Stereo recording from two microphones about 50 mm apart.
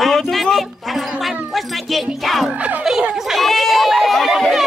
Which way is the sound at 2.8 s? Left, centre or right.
Centre.